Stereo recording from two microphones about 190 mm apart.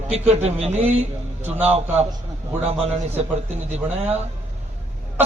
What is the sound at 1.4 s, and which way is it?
Speech, 10° right (ahead or behind).